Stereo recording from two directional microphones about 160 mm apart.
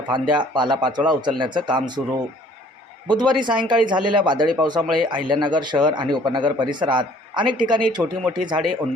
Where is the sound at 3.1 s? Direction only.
30° right (ahead or behind).